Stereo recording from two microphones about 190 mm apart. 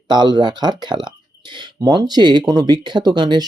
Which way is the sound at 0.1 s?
20° right (ahead or behind).